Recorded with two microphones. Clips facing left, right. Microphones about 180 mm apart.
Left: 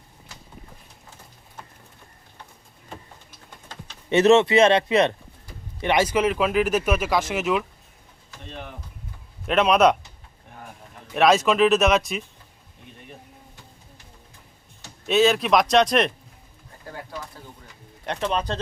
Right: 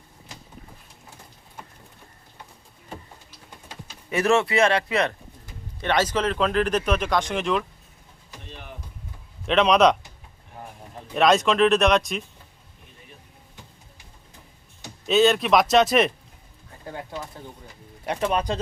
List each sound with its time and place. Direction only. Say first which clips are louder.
4.1 s speech: left 5 dB; 20° left (ahead or behind); by 7.6 s 5° left (ahead or behind)
8.4 s a sound: left 6 dB; 60° left (ahead or behind)
9.5 s speech: even; 5° left (ahead or behind)
11.1 s speech: left 1 dB; centre (ahead or behind)
15.0 s speech: even; centre (ahead or behind)
16.8 s speech: right 2 dB; 20° right (ahead or behind)
18.0 s speech: right 1 dB; 10° right (ahead or behind)